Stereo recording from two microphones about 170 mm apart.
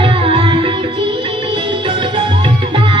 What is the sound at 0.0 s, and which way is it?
Music, 30° right (ahead or behind).